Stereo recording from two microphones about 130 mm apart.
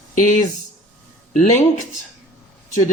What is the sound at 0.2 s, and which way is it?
A man's voice, 75° left (ahead or behind).